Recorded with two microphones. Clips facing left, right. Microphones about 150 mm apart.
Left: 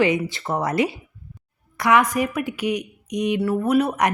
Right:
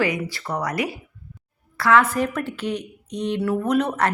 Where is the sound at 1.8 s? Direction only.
15° left (ahead or behind).